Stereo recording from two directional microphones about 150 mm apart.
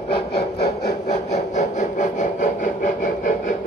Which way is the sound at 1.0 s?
50° left (ahead or behind).